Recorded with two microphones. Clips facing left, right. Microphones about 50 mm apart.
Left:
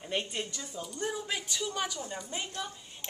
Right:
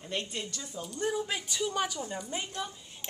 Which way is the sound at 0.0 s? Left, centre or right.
Centre.